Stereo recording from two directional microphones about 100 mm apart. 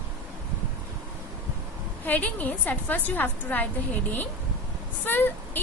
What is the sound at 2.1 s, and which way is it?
A woman's voice, 15° left (ahead or behind).